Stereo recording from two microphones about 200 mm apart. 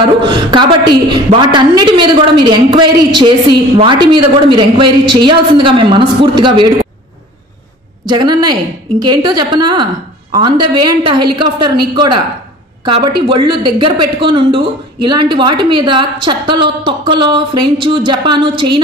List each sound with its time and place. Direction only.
0.2 s a woman's voice: 20° right (ahead or behind)
8.0 s a woman's voice: 20° right (ahead or behind)